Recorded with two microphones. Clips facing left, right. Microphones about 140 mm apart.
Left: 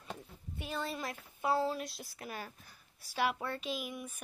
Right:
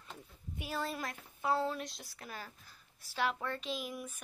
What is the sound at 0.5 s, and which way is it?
A woman's voice, 5° right (ahead or behind).